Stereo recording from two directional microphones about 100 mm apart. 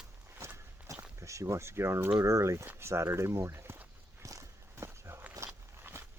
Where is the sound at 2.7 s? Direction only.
25° right (ahead or behind).